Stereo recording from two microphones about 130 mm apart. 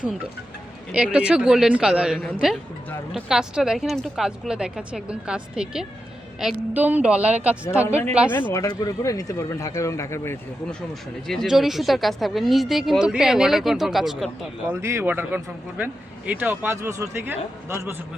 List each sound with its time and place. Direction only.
0.9 s speech: 10° right (ahead or behind)
8.5 s speech: 30° left (ahead or behind)
11.3 s speech: centre (ahead or behind)
14.7 s speech: 20° right (ahead or behind)